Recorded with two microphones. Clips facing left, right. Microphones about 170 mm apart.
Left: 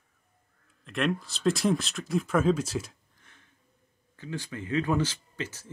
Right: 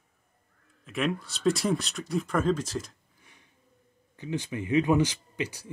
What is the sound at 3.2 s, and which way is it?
Sniff, 15° right (ahead or behind).